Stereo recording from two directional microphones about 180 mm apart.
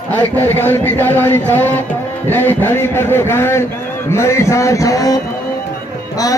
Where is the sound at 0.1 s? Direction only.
10° left (ahead or behind).